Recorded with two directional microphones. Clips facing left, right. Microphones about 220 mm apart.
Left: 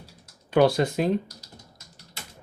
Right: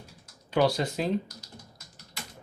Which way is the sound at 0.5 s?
55° left (ahead or behind).